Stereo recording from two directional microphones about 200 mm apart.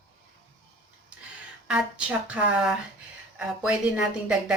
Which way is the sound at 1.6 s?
5° right (ahead or behind).